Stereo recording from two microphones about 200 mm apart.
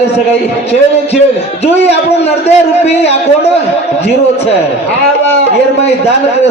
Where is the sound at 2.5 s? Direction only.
30° left (ahead or behind).